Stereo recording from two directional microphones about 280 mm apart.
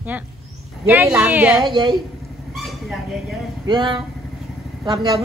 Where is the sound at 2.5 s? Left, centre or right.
Centre.